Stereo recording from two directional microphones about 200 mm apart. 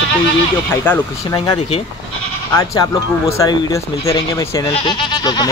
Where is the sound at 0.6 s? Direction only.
10° left (ahead or behind).